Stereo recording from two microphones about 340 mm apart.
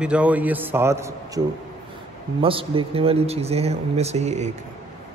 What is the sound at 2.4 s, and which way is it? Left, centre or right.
A man's voice, centre.